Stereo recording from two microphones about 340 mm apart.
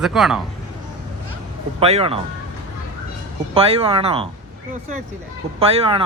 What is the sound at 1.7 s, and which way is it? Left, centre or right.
Speech, centre.